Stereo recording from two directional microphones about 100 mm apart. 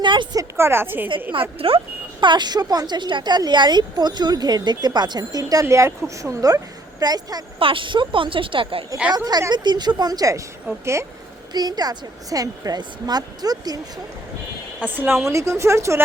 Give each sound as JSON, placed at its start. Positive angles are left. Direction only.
{"t": 0.0, "sound": "a sound", "side_deg": -50}
{"t": 0.3, "sound": "a woman's voice", "side_deg": -25}
{"t": 1.3, "sound": "speech", "side_deg": -65}
{"t": 2.2, "sound": "a woman's voice", "side_deg": -50}
{"t": 7.6, "sound": "a woman's voice", "side_deg": -60}
{"t": 9.1, "sound": "a woman's voice", "side_deg": -40}
{"t": 11.5, "sound": "speech", "side_deg": -45}
{"t": 14.8, "sound": "a woman's voice", "side_deg": -20}